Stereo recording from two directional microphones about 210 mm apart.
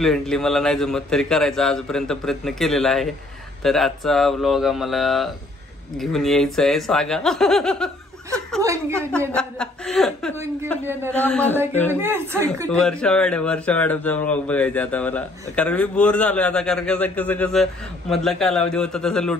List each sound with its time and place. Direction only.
0.0 s a man's voice: centre (ahead or behind)
9.3 s speech: 5° left (ahead or behind)
10.3 s a woman's voice: 10° right (ahead or behind)
11.1 s speech: 10° left (ahead or behind)
11.9 s a woman's voice: 10° right (ahead or behind)
12.7 s a man's voice: 5° left (ahead or behind)